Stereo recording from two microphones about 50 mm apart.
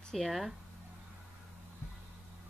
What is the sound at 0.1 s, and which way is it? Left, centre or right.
Speech, centre.